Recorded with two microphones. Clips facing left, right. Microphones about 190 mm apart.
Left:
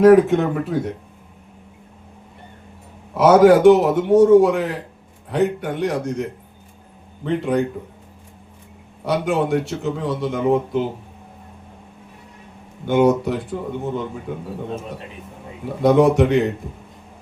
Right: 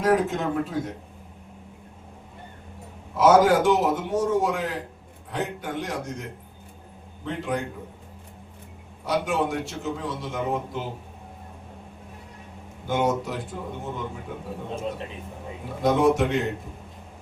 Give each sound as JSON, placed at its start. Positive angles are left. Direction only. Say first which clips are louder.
{"t": 0.0, "sound": "a man's voice", "louder": "left 11 dB", "side_deg": 65}
{"t": 3.2, "sound": "a man's voice", "louder": "left 6 dB", "side_deg": 65}
{"t": 7.3, "sound": "a man's voice", "louder": "left 8 dB", "side_deg": 60}
{"t": 9.0, "sound": "a man's voice", "louder": "left 5 dB", "side_deg": 65}
{"t": 12.9, "sound": "a man's voice", "louder": "left 8 dB", "side_deg": 65}
{"t": 15.8, "sound": "a man's voice", "louder": "left 6 dB", "side_deg": 65}